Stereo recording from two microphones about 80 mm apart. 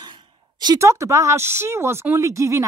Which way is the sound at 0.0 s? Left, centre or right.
Right.